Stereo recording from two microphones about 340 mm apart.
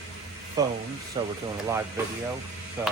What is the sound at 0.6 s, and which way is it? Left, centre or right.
Speech, centre.